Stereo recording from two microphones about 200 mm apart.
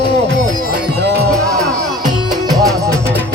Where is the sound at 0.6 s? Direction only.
55° right (ahead or behind).